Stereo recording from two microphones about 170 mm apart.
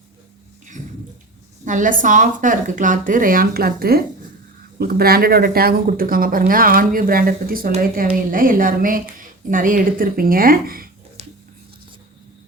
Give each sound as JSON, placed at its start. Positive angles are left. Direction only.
{"t": 1.6, "sound": "speech", "side_deg": -50}